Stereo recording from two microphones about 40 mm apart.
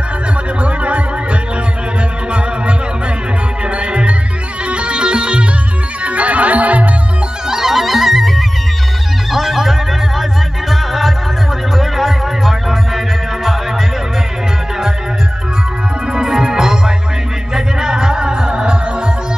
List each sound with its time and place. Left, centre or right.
0.6 s music: right
3.6 s music: right
6.0 s music: right
7.4 s music: centre
16.1 s music: centre